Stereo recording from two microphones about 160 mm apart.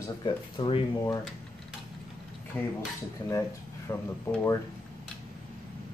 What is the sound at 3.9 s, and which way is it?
Speech, 15° left (ahead or behind).